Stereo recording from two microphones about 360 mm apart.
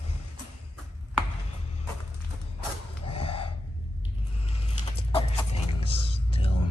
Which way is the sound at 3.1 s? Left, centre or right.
Centre.